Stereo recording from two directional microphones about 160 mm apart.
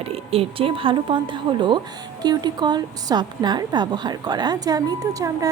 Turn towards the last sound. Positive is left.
turn(degrees=-20)  # may be behind; listen again after turning